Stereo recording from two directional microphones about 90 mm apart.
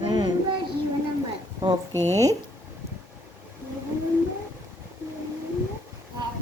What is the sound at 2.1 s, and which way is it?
Speech, 40° right (ahead or behind).